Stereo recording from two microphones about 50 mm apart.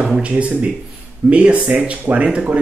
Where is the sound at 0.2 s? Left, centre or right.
Right.